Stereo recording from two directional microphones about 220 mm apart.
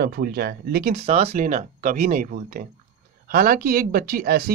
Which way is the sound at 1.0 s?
25° right (ahead or behind).